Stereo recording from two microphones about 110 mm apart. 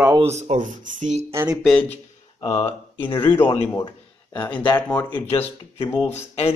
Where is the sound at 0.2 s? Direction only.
85° right.